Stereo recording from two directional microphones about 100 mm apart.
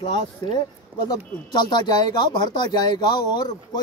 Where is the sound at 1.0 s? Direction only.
45° left (ahead or behind).